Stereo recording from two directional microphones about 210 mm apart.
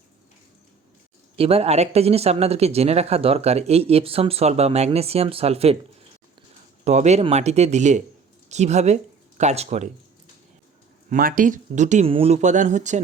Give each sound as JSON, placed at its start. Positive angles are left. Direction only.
{"t": 1.4, "sound": "speech", "side_deg": -30}
{"t": 11.1, "sound": "speech", "side_deg": -40}